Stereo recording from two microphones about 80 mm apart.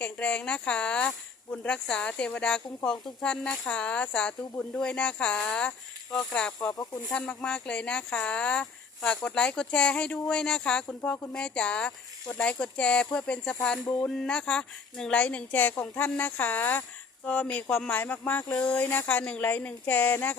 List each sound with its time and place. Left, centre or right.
0.0 s speech: centre